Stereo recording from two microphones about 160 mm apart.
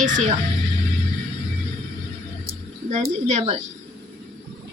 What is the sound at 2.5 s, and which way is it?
Speech, 45° right (ahead or behind).